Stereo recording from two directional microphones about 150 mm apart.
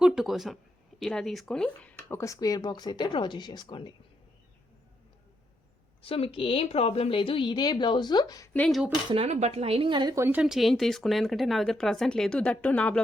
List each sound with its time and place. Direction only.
0.0 s speech: 5° right (ahead or behind); by 3.9 s 30° left (ahead or behind)
6.0 s a woman's voice: 40° left (ahead or behind)
8.5 s speech: 5° left (ahead or behind)
9.0 s a woman's voice: 40° right (ahead or behind)
10.2 s a woman's voice: 15° right (ahead or behind)
10.4 s speech: centre (ahead or behind)